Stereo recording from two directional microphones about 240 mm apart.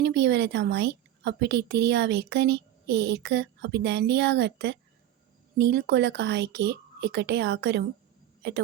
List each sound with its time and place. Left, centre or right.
0.0 s a woman's voice: right